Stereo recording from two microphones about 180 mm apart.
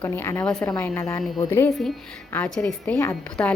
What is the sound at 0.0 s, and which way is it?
A woman's voice, 10° left (ahead or behind).